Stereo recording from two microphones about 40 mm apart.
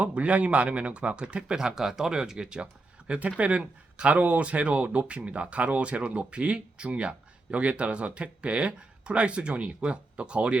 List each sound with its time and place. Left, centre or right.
0.0 s speech: right